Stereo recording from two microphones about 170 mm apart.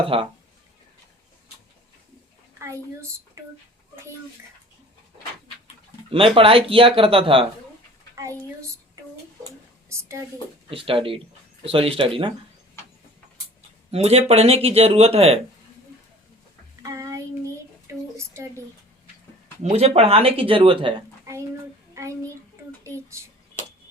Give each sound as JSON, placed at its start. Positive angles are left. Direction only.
{"t": 0.0, "sound": "speech", "side_deg": -30}
{"t": 2.6, "sound": "a woman's voice", "side_deg": -15}
{"t": 6.1, "sound": "speech", "side_deg": -30}
{"t": 8.1, "sound": "a sound", "side_deg": -20}
{"t": 9.9, "sound": "a woman's voice", "side_deg": -15}
{"t": 10.7, "sound": "speech", "side_deg": -30}
{"t": 13.9, "sound": "speech", "side_deg": -40}
{"t": 16.8, "sound": "child singing", "side_deg": -20}
{"t": 18.4, "sound": "speech", "side_deg": -15}
{"t": 19.7, "sound": "speech", "side_deg": -35}
{"t": 21.3, "sound": "a sound", "side_deg": -15}
{"t": 22.8, "sound": "speech", "side_deg": -15}